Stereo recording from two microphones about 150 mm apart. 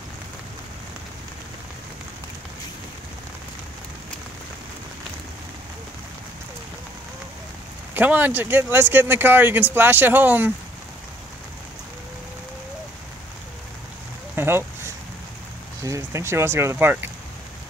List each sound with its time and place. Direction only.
7.9 s speech: 10° right (ahead or behind)
14.3 s a sound: 15° right (ahead or behind)
15.8 s speech: 20° right (ahead or behind)